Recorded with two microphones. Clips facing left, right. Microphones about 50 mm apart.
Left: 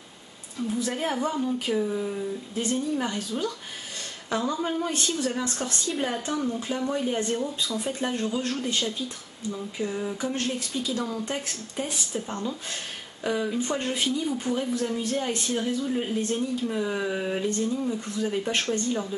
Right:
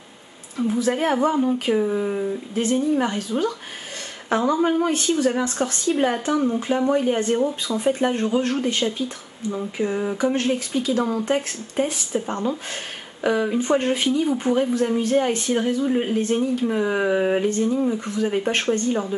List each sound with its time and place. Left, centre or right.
0.8 s speech: right
4.3 s speech: right
5.9 s speech: centre
6.2 s speech: right